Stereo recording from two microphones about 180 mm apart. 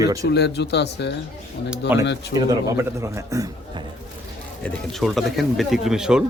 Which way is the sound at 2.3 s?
20° right (ahead or behind).